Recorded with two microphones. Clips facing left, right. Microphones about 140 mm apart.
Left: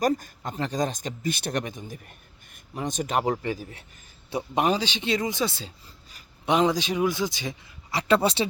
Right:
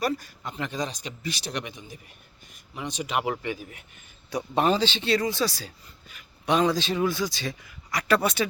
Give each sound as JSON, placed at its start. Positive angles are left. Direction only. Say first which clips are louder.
{"t": 0.0, "sound": "a man's voice", "louder": "left 4 dB", "side_deg": 45}
{"t": 4.6, "sound": "a man's voice", "louder": "right 2 dB", "side_deg": 15}